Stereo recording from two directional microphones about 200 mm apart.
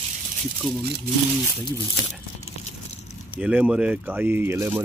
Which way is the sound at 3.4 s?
5° right (ahead or behind).